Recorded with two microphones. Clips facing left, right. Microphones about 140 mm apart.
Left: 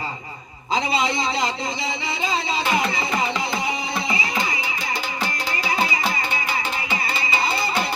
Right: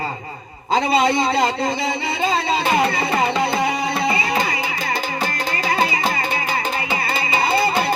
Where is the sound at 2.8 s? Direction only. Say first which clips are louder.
Right 5 dB; 60° right (ahead or behind).